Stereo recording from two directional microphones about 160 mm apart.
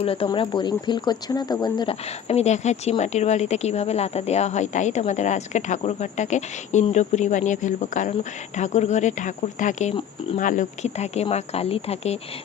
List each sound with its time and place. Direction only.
0.0 s speech: 35° left (ahead or behind)
2.2 s speech: 45° left (ahead or behind)